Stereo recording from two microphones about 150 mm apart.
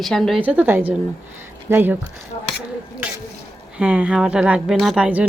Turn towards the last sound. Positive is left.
turn(degrees=-5)  # may be behind; listen again after turning